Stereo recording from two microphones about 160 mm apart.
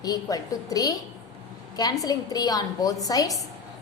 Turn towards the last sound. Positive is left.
turn(degrees=20)  # may be behind; listen again after turning